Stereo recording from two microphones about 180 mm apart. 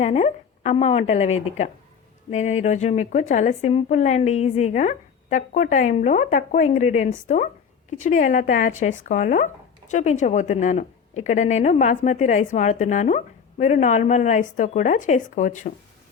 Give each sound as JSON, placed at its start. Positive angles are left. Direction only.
{"t": 0.0, "sound": "a woman's voice", "side_deg": 35}